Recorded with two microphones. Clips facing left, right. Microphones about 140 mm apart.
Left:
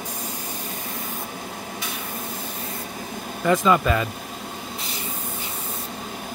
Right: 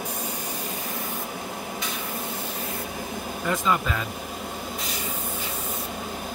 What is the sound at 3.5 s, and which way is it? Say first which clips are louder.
Speech: left 7 dB; 80° left.